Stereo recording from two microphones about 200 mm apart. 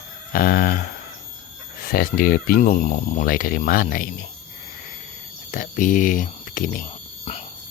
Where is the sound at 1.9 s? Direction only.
50° left (ahead or behind).